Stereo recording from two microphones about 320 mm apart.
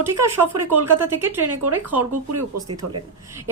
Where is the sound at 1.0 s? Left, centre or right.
Centre.